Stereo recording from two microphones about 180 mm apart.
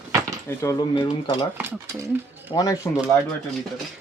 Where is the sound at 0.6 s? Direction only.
20° left (ahead or behind).